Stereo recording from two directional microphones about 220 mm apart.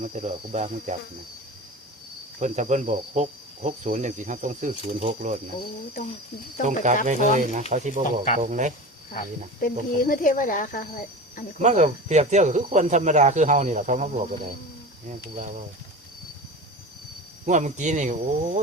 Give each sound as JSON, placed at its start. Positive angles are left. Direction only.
{"t": 0.0, "sound": "cricket", "side_deg": -30}
{"t": 2.4, "sound": "cricket", "side_deg": -30}
{"t": 6.7, "sound": "cricket", "side_deg": -35}
{"t": 9.6, "sound": "speech", "side_deg": 40}
{"t": 11.6, "sound": "cricket", "side_deg": -35}
{"t": 15.4, "sound": "cricket", "side_deg": -35}
{"t": 17.4, "sound": "cricket", "side_deg": -35}